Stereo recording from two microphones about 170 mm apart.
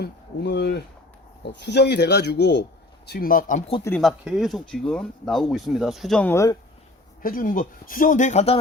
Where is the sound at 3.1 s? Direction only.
60° left (ahead or behind).